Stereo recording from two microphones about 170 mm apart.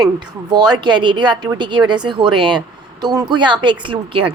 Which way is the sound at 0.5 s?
25° right (ahead or behind).